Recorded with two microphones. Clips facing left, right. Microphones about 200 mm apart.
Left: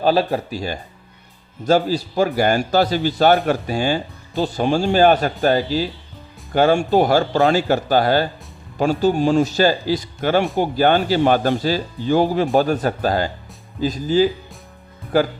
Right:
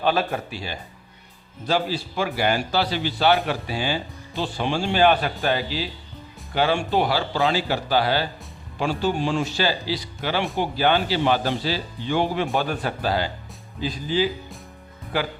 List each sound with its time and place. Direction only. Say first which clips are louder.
0.0 s speech: left 5 dB; 35° left (ahead or behind)